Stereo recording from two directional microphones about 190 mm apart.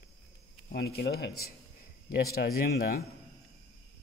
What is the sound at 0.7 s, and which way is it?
A man's voice, 55° left (ahead or behind).